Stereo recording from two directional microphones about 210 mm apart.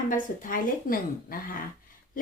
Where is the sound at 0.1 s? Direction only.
40° left (ahead or behind).